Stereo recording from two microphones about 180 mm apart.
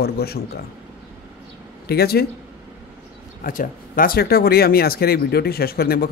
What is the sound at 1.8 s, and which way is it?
Speech, 60° left (ahead or behind).